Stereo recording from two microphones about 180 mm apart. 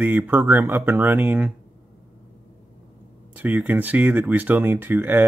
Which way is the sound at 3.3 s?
10° right (ahead or behind).